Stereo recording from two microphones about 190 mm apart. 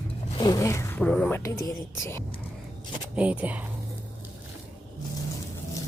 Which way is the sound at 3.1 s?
5° right (ahead or behind).